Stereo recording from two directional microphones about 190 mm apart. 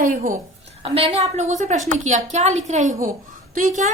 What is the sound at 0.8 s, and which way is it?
A woman's voice, 30° right (ahead or behind).